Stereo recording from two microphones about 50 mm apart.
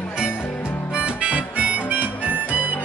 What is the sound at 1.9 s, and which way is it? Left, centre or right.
Harmonica, right.